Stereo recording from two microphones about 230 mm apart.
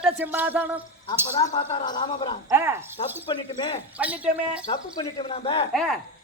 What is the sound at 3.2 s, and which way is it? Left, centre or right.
Speech, left.